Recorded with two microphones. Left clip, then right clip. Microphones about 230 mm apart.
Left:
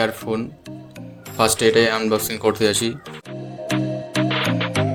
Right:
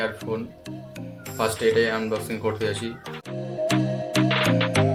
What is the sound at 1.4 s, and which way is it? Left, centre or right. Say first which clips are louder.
Speech: left 5 dB; left.